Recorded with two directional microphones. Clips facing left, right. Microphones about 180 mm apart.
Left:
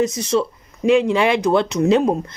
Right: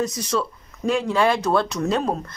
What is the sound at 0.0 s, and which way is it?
A woman's voice, 25° left (ahead or behind).